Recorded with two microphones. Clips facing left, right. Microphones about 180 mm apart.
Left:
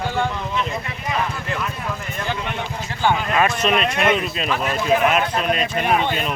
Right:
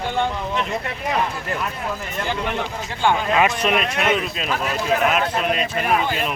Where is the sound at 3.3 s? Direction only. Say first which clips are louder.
Even; 15° right (ahead or behind).